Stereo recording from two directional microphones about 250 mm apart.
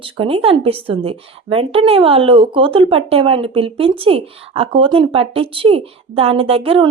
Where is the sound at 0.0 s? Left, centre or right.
Right.